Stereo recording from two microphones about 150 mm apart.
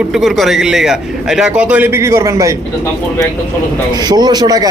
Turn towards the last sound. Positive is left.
turn(degrees=-25)  # may be behind; listen again after turning